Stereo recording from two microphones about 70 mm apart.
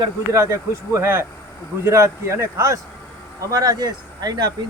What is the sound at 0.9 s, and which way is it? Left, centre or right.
A man's voice, right.